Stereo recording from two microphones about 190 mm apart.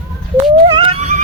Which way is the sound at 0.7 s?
30° right (ahead or behind).